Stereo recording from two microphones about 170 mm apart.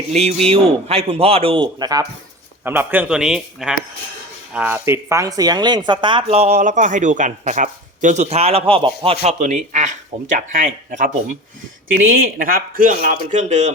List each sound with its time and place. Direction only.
0.4 s speech: 35° right (ahead or behind)
2.6 s speech: 10° right (ahead or behind); by 11.1 s 50° right (ahead or behind)
12.1 s speech: 60° right (ahead or behind); by 13.7 s 40° right (ahead or behind)